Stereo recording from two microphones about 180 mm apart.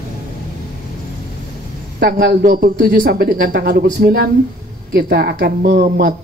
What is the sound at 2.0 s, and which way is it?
A man's voice, 55° right (ahead or behind).